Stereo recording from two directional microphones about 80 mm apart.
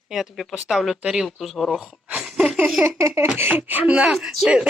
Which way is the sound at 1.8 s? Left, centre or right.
Centre.